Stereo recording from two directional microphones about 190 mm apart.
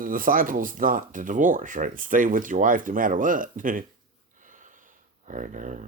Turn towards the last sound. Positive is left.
turn(degrees=-40)  # may be behind; listen again after turning